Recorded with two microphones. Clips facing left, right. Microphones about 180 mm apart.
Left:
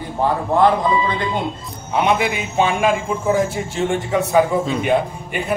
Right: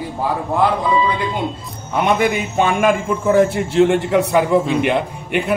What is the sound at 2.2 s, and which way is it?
Speech, 50° right (ahead or behind).